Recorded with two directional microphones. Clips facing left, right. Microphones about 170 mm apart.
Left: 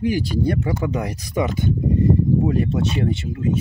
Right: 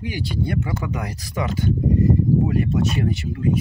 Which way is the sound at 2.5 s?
30° left (ahead or behind).